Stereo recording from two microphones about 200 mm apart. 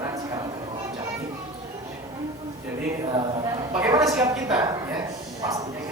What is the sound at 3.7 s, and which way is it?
Speech, 15° right (ahead or behind).